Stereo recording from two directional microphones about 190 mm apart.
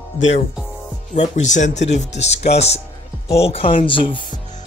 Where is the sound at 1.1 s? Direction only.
40° left (ahead or behind).